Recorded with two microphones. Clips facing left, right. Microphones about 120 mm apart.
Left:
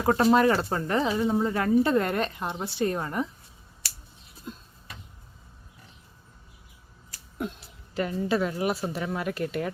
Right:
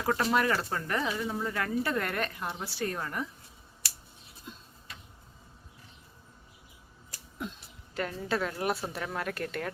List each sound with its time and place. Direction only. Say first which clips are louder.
0.0 s speech: left 7 dB; 30° left (ahead or behind)
7.9 s a woman's voice: left 5 dB; 5° left (ahead or behind)